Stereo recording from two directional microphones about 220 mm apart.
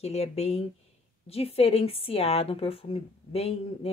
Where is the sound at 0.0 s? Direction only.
30° left (ahead or behind).